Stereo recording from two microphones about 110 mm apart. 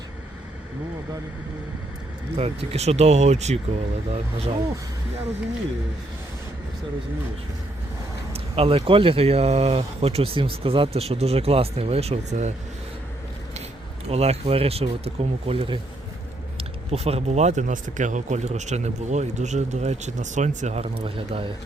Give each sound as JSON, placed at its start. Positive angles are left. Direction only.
{"t": 2.3, "sound": "speech", "side_deg": -70}
{"t": 8.3, "sound": "speech", "side_deg": -60}
{"t": 14.0, "sound": "speech", "side_deg": -70}
{"t": 16.6, "sound": "speech", "side_deg": -70}